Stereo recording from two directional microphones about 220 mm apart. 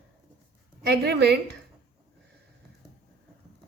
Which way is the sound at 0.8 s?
45° right (ahead or behind).